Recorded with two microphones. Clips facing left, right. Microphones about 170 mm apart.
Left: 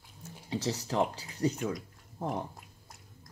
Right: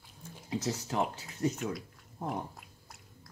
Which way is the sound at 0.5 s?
30° left (ahead or behind).